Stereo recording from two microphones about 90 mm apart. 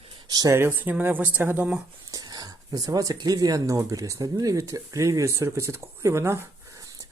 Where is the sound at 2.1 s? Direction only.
45° right (ahead or behind).